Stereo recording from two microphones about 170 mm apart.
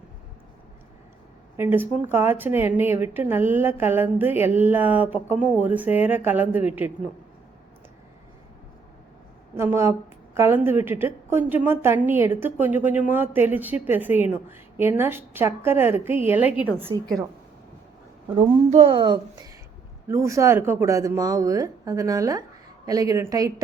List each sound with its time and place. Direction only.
1.5 s a woman's voice: 10° right (ahead or behind)
9.6 s a woman's voice: 15° right (ahead or behind)
18.3 s speech: 35° right (ahead or behind); by 23.6 s 20° right (ahead or behind)